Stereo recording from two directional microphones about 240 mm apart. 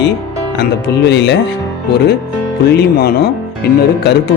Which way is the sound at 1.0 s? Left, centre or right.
Left.